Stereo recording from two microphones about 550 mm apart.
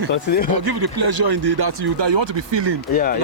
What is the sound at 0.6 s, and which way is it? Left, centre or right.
Speech, right.